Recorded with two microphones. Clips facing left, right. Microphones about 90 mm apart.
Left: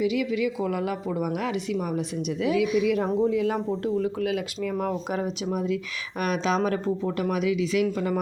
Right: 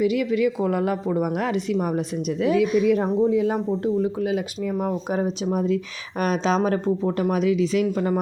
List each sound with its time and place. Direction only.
0.0 s a woman's voice: 50° right (ahead or behind)
3.2 s speech: 25° right (ahead or behind)
4.7 s speech: 15° right (ahead or behind)
5.1 s speech: 30° right (ahead or behind)